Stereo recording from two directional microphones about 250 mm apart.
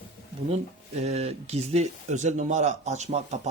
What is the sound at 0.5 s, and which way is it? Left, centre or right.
Speech, right.